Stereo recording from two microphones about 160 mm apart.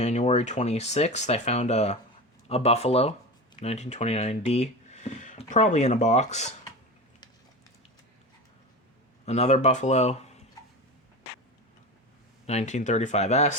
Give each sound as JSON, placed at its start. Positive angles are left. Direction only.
{"t": 0.0, "sound": "speech", "side_deg": 45}
{"t": 9.2, "sound": "speech", "side_deg": 40}
{"t": 12.5, "sound": "speech", "side_deg": 45}